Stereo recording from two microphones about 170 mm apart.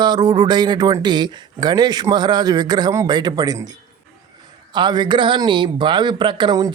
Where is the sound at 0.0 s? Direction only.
25° right (ahead or behind).